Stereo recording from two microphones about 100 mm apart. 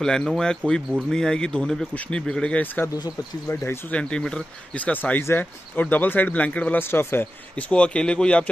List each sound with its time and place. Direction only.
0.0 s speech: 5° left (ahead or behind)
3.9 s speech: 10° left (ahead or behind)
7.7 s speech: 10° left (ahead or behind)